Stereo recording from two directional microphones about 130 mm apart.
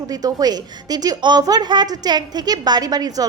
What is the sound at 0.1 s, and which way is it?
A woman's voice, 30° right (ahead or behind).